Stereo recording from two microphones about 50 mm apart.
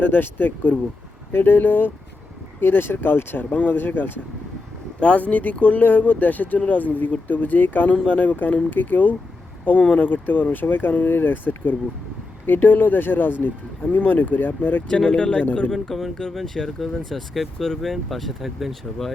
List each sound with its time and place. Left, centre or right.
0.0 s speech: left
2.6 s speech: left
4.9 s speech: left
15.0 s speech: centre